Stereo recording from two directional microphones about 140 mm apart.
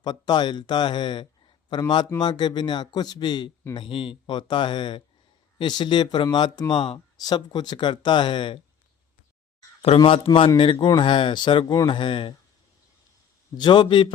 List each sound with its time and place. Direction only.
0.0 s speech: 30° left (ahead or behind)
10.0 s speech: 35° left (ahead or behind)
13.6 s speech: 35° left (ahead or behind)